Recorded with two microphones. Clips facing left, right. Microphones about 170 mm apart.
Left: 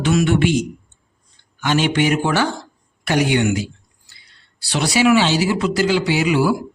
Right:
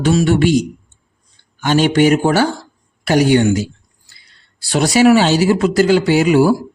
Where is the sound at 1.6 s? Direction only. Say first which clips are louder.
Right 5 dB; 40° right (ahead or behind).